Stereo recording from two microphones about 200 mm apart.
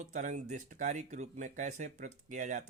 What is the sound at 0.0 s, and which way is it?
Speech, 40° right (ahead or behind).